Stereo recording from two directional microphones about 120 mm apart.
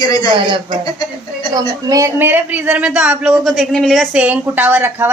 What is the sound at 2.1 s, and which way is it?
Speech, 15° right (ahead or behind).